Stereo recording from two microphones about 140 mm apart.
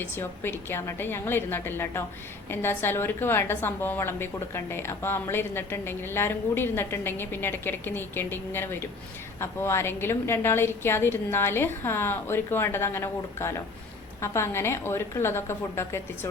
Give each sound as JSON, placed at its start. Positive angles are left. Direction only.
{"t": 0.0, "sound": "a woman's voice", "side_deg": 15}